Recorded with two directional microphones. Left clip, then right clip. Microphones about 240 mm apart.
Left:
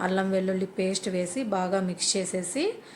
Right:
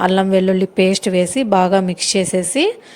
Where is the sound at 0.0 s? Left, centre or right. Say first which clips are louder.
Right 12 dB; right.